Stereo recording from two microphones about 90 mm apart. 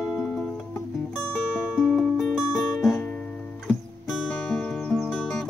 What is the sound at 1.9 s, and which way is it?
Music, centre (ahead or behind).